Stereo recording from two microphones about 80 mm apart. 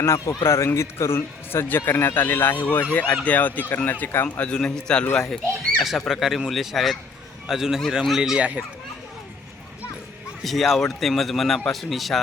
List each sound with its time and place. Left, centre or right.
0.0 s a man's voice: left
4.4 s a man's voice: centre
5.8 s speech: centre
8.4 s a child's voice: centre
10.4 s speech: centre